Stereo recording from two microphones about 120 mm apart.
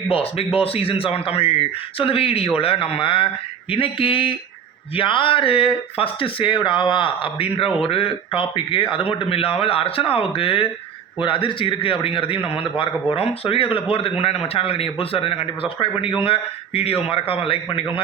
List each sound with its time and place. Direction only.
0.1 s speech: 55° left (ahead or behind)